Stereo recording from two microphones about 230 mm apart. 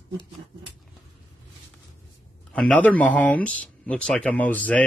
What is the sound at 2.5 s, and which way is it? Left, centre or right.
Speech, centre.